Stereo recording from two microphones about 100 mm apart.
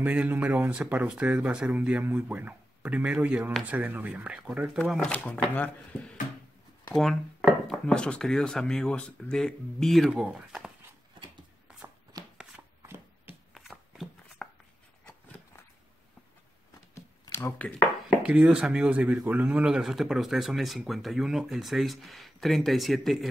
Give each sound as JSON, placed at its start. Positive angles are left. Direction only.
{"t": 0.0, "sound": "speech", "side_deg": -15}
{"t": 5.0, "sound": "speech", "side_deg": 10}
{"t": 10.1, "sound": "speech", "side_deg": -5}
{"t": 12.8, "sound": "shuffling cards", "side_deg": -20}
{"t": 13.6, "sound": "a sound", "side_deg": 0}
{"t": 17.3, "sound": "a sound", "side_deg": 25}
{"t": 17.6, "sound": "speech", "side_deg": 15}
{"t": 18.2, "sound": "a man's voice", "side_deg": -10}